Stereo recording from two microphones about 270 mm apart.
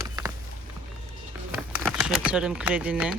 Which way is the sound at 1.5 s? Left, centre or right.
Centre.